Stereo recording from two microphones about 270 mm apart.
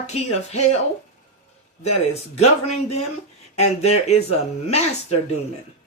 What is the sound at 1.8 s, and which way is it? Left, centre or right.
Speech, left.